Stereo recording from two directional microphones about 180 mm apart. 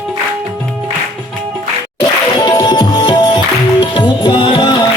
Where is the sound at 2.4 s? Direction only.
20° left (ahead or behind).